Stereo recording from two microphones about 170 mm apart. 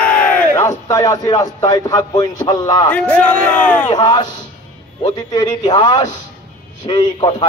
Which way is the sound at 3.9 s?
25° left (ahead or behind).